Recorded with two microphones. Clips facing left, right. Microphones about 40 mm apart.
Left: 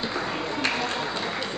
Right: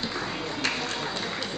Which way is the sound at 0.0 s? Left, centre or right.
Centre.